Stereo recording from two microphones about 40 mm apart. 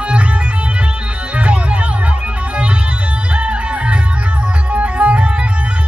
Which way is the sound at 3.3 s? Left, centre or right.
Right.